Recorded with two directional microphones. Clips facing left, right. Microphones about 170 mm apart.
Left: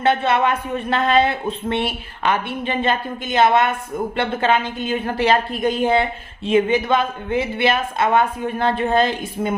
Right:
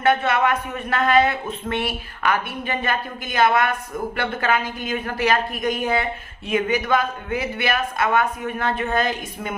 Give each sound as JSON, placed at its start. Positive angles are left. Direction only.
{"t": 0.0, "sound": "a woman's voice", "side_deg": 25}